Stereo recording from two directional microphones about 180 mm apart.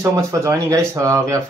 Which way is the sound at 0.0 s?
15° right (ahead or behind).